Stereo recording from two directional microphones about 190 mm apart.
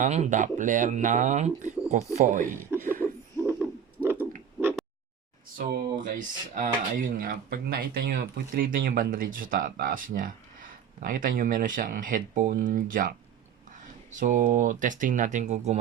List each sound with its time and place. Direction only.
0.0 s speech: 40° right (ahead or behind)
2.7 s a sound: 10° right (ahead or behind)
5.5 s speech: 45° right (ahead or behind)